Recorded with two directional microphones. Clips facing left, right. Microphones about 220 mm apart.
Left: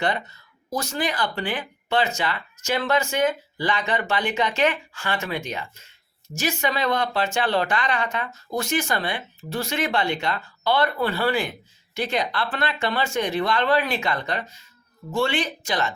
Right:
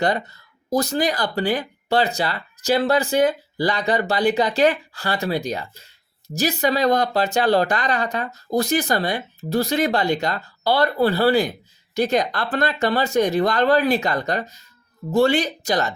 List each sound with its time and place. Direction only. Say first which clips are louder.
0.0 s speech: right 4 dB; 40° right (ahead or behind)